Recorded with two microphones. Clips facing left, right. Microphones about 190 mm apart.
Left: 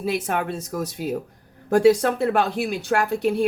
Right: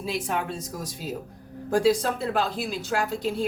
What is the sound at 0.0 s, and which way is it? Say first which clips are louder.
Speech: left 4 dB; 60° left (ahead or behind).